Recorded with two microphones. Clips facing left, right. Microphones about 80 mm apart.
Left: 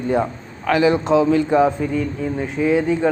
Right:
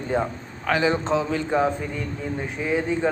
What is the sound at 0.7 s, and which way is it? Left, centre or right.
Speech, centre.